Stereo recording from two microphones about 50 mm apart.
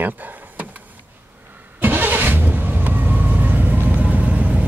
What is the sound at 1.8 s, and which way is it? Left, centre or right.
Vehicle, right.